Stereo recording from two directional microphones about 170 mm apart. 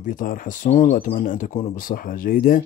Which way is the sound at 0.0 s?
55° left (ahead or behind).